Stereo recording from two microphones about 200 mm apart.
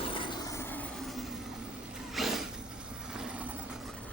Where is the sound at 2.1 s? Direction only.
Centre (ahead or behind).